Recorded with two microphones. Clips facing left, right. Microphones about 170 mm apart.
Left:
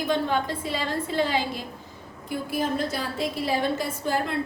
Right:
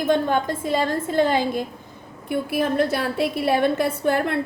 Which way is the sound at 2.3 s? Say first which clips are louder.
Right 5 dB; 65° right (ahead or behind).